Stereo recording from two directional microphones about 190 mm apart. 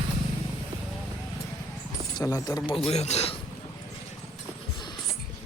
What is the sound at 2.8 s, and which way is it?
Speech, 35° left (ahead or behind).